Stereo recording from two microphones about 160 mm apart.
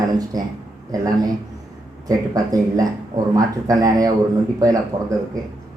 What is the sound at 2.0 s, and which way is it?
Speech, 20° right (ahead or behind).